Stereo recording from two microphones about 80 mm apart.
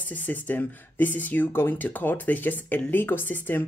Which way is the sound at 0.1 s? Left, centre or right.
Left.